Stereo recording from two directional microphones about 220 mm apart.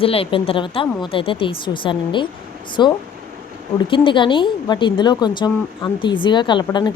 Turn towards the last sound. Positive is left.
turn(degrees=20)  # may be behind; listen again after turning